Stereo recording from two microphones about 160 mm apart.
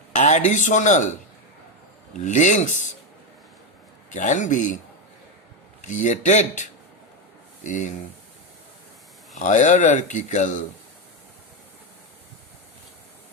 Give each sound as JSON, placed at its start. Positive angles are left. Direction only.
{"t": 0.1, "sound": "speech", "side_deg": 50}
{"t": 2.1, "sound": "speech", "side_deg": 50}
{"t": 4.1, "sound": "speech", "side_deg": 50}
{"t": 5.8, "sound": "speech", "side_deg": 50}
{"t": 9.3, "sound": "speech", "side_deg": 50}